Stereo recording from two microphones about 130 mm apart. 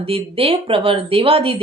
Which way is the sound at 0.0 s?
45° right (ahead or behind).